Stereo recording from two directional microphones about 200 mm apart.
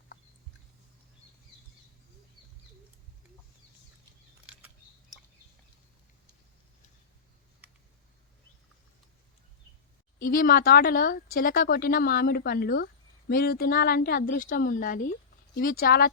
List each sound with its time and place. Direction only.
7.6 s computer keyboard: 10° right (ahead or behind)
10.2 s speech: 45° left (ahead or behind)